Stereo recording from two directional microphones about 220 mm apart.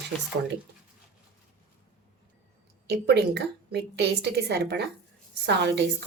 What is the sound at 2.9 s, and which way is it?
A woman's voice, 50° right (ahead or behind).